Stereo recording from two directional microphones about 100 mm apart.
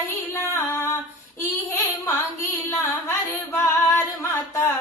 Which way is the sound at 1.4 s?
25° left (ahead or behind).